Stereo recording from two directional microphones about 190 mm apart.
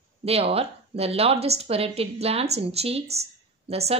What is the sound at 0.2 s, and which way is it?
A woman's voice, 30° right (ahead or behind).